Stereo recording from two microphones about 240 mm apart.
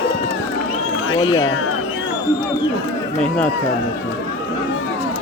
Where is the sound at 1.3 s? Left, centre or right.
Left.